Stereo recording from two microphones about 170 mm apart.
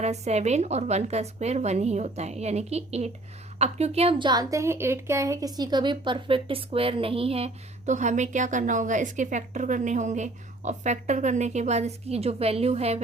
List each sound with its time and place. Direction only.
0.0 s a woman's voice: 40° right (ahead or behind)